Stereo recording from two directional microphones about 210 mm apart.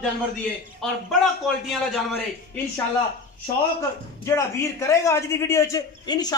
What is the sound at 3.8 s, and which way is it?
A man's voice, 15° left (ahead or behind).